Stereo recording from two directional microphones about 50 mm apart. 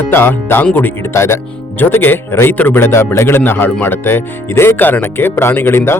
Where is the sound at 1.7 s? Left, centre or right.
Left.